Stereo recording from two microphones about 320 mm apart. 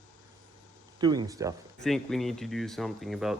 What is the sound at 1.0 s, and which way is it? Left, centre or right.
Speech, centre.